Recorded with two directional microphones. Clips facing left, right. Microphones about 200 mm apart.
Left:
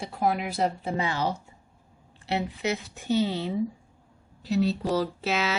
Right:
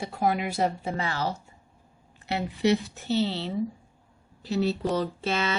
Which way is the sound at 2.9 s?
15° left (ahead or behind).